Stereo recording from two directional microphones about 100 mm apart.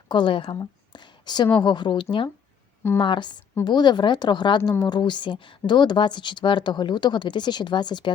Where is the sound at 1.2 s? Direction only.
45° left (ahead or behind).